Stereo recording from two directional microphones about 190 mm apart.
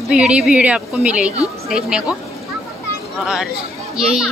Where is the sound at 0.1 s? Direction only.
5° right (ahead or behind).